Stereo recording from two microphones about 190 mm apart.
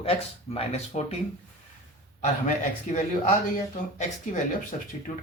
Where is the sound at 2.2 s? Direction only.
40° left (ahead or behind).